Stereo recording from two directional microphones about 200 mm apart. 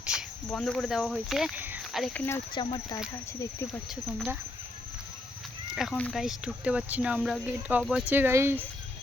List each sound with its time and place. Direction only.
0.0 s a sound: 5° right (ahead or behind)
0.4 s speech: 5° left (ahead or behind)
2.6 s speech: 20° left (ahead or behind)
5.7 s speech: centre (ahead or behind)